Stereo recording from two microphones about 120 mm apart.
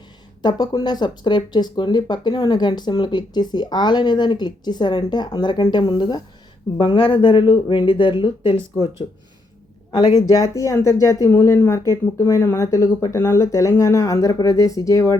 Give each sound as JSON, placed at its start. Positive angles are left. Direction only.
{"t": 0.4, "sound": "speech", "side_deg": 35}
{"t": 9.9, "sound": "speech", "side_deg": 35}